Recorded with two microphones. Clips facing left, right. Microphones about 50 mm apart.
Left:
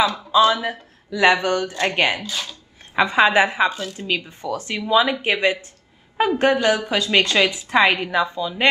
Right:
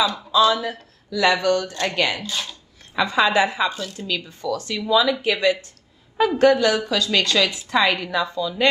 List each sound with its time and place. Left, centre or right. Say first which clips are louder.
0.0 s a woman's voice: left 2 dB; left